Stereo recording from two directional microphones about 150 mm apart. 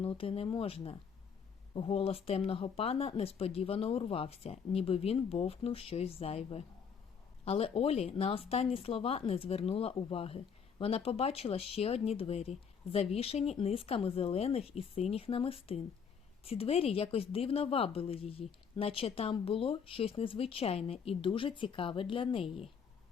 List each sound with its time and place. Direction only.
0.0 s speech: 40° left (ahead or behind)